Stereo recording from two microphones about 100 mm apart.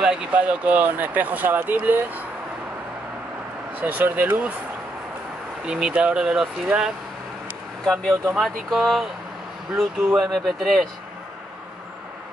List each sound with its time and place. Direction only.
0.0 s speech: 10° right (ahead or behind)
3.8 s speech: 15° right (ahead or behind)
5.7 s speech: 10° right (ahead or behind)
7.8 s speech: 5° left (ahead or behind)
10.1 s speech: centre (ahead or behind)